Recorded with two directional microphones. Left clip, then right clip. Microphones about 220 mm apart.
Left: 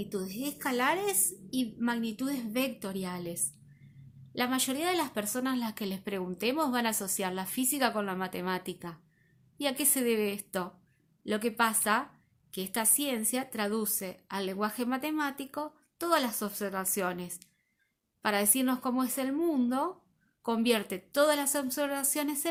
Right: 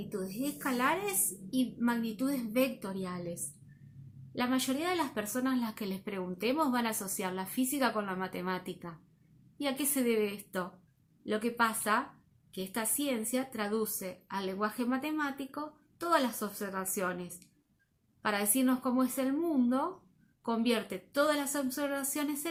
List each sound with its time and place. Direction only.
0.0 s a woman's voice: 40° left (ahead or behind)
4.4 s speech: 45° left (ahead or behind)